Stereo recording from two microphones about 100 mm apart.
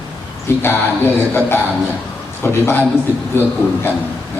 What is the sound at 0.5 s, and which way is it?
A man's voice, 25° left (ahead or behind).